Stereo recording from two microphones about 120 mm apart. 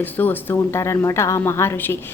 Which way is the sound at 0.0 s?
15° left (ahead or behind).